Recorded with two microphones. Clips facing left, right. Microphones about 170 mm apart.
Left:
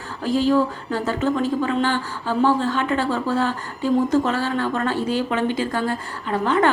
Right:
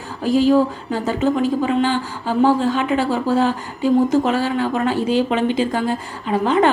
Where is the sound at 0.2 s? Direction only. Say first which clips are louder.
Right 4 dB; 15° right (ahead or behind).